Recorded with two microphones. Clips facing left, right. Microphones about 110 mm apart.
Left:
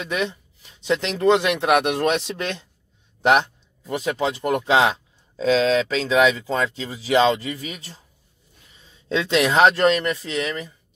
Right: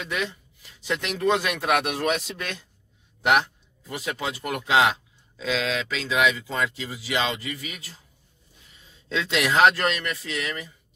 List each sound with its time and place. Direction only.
0.1 s speech: 25° left (ahead or behind)
9.1 s speech: 30° left (ahead or behind)